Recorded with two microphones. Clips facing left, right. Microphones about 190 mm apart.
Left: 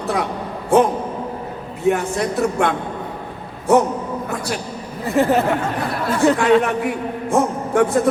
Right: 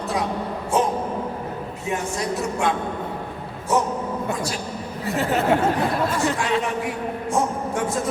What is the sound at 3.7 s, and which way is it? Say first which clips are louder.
Speech: left 7 dB; 60° left (ahead or behind).